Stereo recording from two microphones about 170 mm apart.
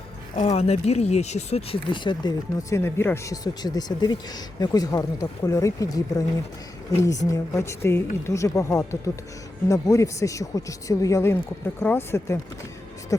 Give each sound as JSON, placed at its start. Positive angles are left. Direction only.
{"t": 0.3, "sound": "speech", "side_deg": 40}